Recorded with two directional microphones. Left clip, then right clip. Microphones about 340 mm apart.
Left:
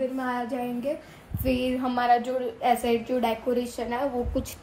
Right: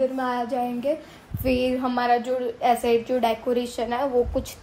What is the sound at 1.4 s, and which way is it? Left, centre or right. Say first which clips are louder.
A woman's voice: right 4 dB; centre.